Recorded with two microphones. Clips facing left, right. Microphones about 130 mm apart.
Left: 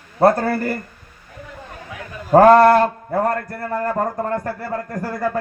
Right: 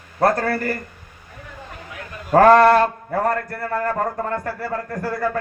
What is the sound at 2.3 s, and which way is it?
A man's voice, 20° left (ahead or behind).